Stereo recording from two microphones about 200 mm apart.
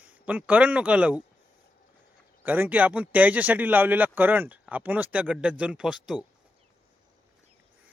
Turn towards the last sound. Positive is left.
turn(degrees=-5)  # may be behind; listen again after turning